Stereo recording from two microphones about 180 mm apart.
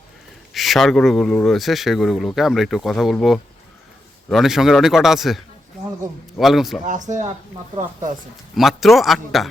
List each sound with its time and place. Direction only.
0.5 s speech: centre (ahead or behind)
6.8 s speech: 45° right (ahead or behind)
8.5 s speech: centre (ahead or behind)